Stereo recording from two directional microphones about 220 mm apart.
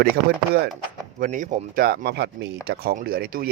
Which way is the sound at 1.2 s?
35° right (ahead or behind).